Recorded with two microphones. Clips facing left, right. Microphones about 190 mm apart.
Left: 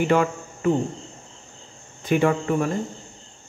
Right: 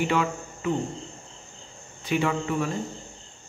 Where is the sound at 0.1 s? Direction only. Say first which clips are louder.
Left 5 dB; 50° left (ahead or behind).